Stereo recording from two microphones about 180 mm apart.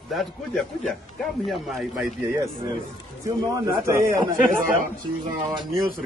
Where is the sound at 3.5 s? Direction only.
20° right (ahead or behind).